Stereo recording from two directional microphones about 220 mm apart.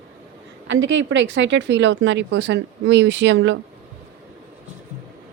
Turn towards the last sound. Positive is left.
turn(degrees=-55)  # may be behind; listen again after turning